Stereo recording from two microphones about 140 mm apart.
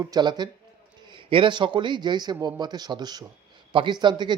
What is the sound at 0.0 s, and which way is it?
Speech, 30° right (ahead or behind).